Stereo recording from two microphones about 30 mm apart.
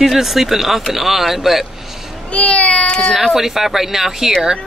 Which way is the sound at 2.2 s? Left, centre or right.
Left.